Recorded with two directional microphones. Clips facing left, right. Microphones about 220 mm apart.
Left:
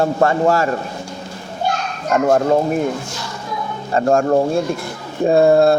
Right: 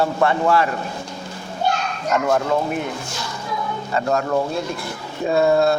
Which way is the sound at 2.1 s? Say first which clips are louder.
Left 5 dB; 40° left (ahead or behind).